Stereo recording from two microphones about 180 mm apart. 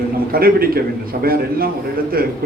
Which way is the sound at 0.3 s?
55° right (ahead or behind).